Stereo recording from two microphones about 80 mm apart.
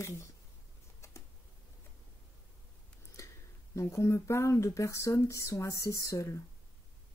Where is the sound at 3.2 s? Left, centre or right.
Left.